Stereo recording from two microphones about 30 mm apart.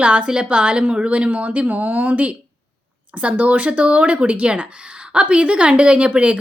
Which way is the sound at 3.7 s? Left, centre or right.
Right.